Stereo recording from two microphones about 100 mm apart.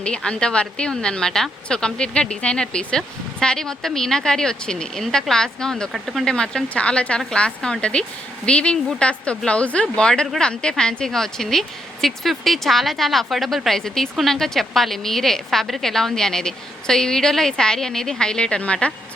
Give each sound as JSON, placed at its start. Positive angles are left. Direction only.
{"t": 0.0, "sound": "speech", "side_deg": 10}